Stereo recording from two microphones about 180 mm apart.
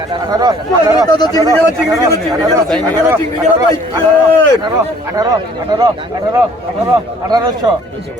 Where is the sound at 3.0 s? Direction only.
15° right (ahead or behind).